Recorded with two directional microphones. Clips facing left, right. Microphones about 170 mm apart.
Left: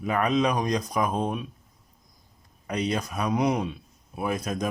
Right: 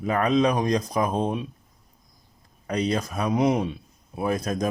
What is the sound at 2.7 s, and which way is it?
Speech, 35° right (ahead or behind).